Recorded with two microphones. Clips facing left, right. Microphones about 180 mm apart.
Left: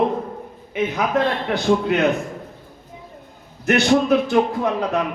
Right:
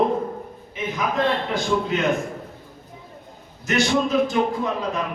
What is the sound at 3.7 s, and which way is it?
A man's voice, 60° left (ahead or behind).